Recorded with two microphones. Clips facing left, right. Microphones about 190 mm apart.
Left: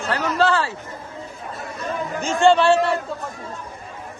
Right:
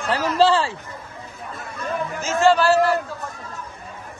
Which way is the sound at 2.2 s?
Centre (ahead or behind).